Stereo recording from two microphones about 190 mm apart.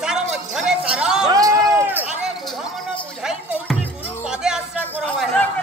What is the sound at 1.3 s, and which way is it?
Run, 20° right (ahead or behind).